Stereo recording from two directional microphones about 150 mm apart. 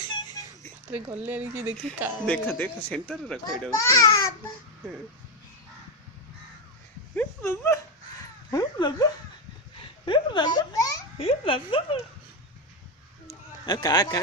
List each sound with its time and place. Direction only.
0.1 s a sound: 30° left (ahead or behind)
1.2 s speech: 15° right (ahead or behind)
2.1 s speech: 5° left (ahead or behind)
3.8 s speech: 20° left (ahead or behind)
7.2 s speech: 20° left (ahead or behind)
10.1 s a child's voice: 30° left (ahead or behind)
11.2 s speech: 40° left (ahead or behind)
13.7 s speech: 30° left (ahead or behind)